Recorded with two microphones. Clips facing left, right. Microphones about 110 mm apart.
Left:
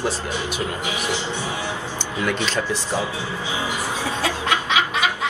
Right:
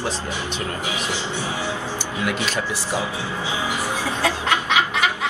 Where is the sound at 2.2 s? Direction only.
10° right (ahead or behind).